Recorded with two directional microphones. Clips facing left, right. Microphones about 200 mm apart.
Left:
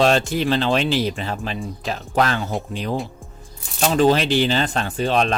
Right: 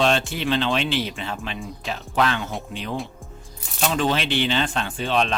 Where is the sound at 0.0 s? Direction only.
40° left (ahead or behind).